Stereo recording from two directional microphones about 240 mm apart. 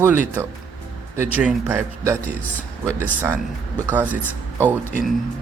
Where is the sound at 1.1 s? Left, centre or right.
Centre.